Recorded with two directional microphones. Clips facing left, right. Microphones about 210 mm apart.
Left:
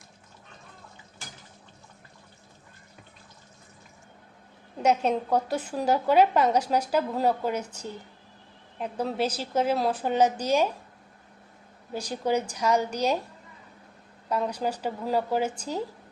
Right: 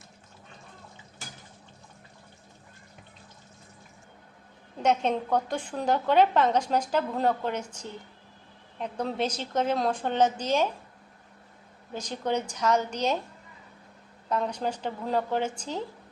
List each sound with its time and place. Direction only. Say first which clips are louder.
4.8 s a woman's voice: left 1 dB; 10° left (ahead or behind)
8.8 s a woman's voice: left 1 dB; 5° left (ahead or behind)
11.9 s a woman's voice: left 3 dB; 10° left (ahead or behind)
14.3 s a woman's voice: left 1 dB; 10° left (ahead or behind)